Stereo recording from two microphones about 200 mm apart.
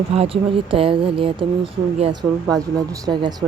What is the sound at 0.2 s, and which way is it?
Speech, 30° right (ahead or behind).